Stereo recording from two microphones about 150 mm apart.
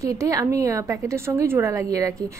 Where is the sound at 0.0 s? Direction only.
20° right (ahead or behind).